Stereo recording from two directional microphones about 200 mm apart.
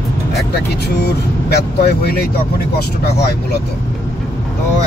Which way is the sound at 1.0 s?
55° left (ahead or behind).